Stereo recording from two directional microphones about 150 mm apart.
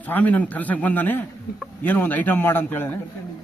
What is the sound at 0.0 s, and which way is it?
A man's voice, 10° left (ahead or behind).